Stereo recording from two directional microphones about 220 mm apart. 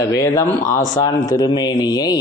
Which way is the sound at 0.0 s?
15° left (ahead or behind).